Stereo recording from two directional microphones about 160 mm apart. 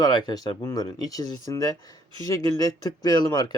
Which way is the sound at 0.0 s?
25° left (ahead or behind).